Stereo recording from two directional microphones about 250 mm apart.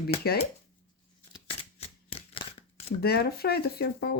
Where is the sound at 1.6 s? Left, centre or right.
Left.